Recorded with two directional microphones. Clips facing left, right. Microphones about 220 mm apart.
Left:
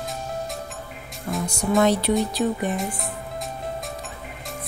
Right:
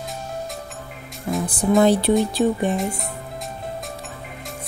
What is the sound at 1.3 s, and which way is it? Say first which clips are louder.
Music: right 4 dB; 25° right (ahead or behind).